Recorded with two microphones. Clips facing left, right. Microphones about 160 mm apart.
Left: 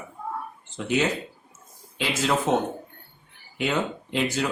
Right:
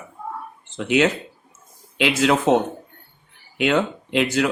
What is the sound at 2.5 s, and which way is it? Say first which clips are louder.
Speech: right 6 dB; 75° right (ahead or behind).